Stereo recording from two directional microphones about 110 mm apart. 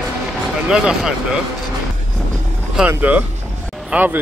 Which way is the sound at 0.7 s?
5° right (ahead or behind).